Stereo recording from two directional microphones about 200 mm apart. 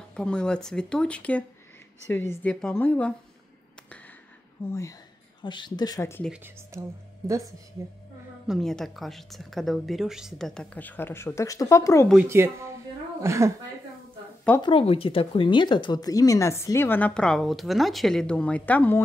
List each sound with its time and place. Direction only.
0.1 s a woman's voice: 5° left (ahead or behind)
4.6 s speech: 15° left (ahead or behind)
6.2 s speech: 10° right (ahead or behind)
8.5 s a woman's voice: centre (ahead or behind)
12.3 s speech: 15° right (ahead or behind)
14.6 s speech: 25° left (ahead or behind); by 19.0 s 10° left (ahead or behind)